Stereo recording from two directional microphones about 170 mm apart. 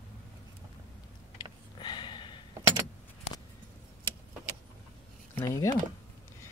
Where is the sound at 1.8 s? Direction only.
25° left (ahead or behind).